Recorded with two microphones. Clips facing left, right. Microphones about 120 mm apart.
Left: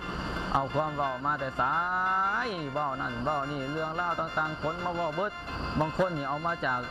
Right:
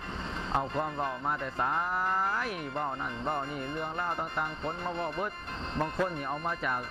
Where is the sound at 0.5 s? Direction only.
10° left (ahead or behind).